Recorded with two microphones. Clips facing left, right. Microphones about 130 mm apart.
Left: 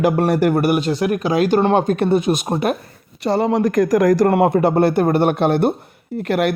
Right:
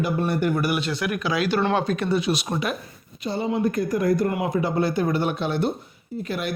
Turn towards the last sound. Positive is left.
turn(degrees=75)  # may be behind; listen again after turning